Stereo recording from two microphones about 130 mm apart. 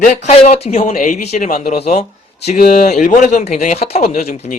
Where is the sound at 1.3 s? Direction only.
75° left (ahead or behind).